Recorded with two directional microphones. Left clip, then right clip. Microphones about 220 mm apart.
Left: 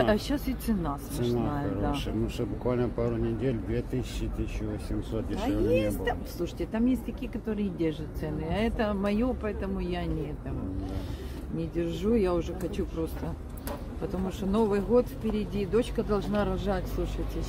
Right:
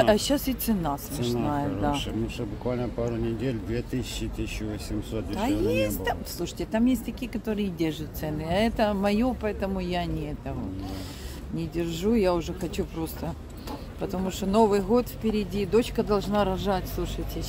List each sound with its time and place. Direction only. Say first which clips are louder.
0.0 s speech: right 5 dB; 45° right (ahead or behind)
2.0 s speech: right 1 dB; 5° left (ahead or behind)
5.4 s speech: right 1 dB; 45° right (ahead or behind)
11.5 s speech: right 1 dB; 40° right (ahead or behind)